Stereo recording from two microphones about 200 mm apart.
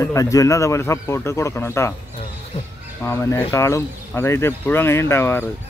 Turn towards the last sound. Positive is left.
turn(degrees=10)  # may be behind; listen again after turning